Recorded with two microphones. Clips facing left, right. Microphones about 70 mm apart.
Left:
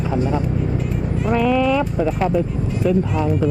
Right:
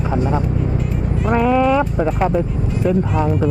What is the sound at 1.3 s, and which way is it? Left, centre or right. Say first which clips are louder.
Speech: right 3 dB; right.